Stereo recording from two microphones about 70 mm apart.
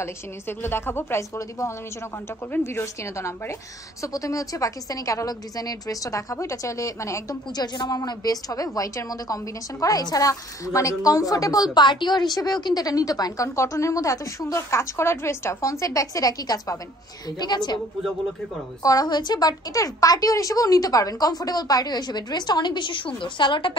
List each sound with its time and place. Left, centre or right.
0.0 s a woman's voice: left
2.6 s a woman's voice: left
7.5 s speech: left
8.0 s a woman's voice: left
17.4 s a woman's voice: left
18.8 s a woman's voice: left